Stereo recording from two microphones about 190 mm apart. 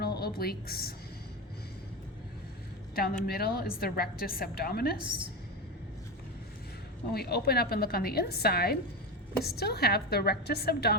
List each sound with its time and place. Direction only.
0.0 s a woman's voice: 55° left (ahead or behind)
2.9 s a woman's voice: 55° left (ahead or behind)
7.1 s a woman's voice: 55° left (ahead or behind)